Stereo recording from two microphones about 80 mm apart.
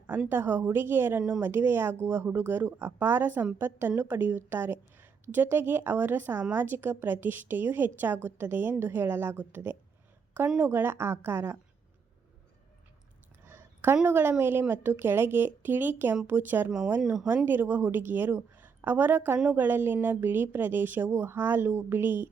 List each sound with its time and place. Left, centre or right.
0.3 s a woman's voice: right
13.4 s a sound: right
13.9 s a woman's voice: right
17.0 s speech: centre
17.2 s a woman's voice: right